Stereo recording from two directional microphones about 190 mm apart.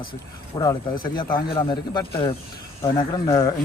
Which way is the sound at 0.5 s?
20° left (ahead or behind).